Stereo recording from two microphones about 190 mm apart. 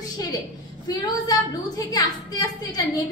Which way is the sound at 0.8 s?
20° left (ahead or behind).